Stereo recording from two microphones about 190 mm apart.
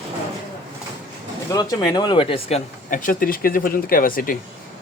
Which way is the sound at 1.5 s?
20° left (ahead or behind).